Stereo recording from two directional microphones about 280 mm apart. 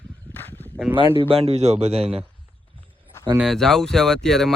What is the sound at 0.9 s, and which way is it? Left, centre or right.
Speech, centre.